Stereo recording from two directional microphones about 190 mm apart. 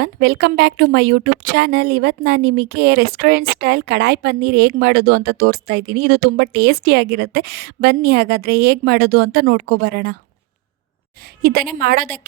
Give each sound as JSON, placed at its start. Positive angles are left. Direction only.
{"t": 0.0, "sound": "a woman's voice", "side_deg": -55}
{"t": 11.4, "sound": "a woman's voice", "side_deg": -55}